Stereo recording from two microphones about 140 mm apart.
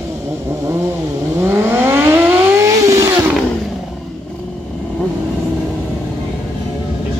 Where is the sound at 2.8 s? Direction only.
25° right (ahead or behind).